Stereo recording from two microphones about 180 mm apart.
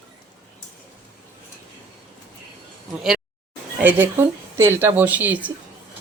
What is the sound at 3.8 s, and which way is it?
Speech, 10° right (ahead or behind).